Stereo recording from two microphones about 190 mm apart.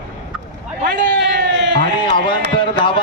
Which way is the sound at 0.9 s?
65° right (ahead or behind).